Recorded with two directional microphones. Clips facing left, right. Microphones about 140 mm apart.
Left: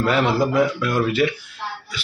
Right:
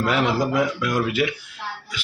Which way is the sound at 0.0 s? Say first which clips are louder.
Left 2 dB; 15° right (ahead or behind).